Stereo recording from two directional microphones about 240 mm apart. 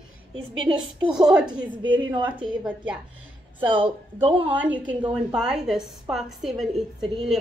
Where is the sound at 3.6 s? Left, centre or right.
Right.